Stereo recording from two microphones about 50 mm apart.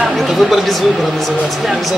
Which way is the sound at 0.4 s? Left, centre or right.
Centre.